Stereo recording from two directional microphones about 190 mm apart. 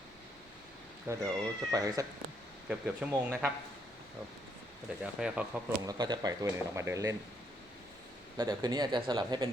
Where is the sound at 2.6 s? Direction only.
5° right (ahead or behind).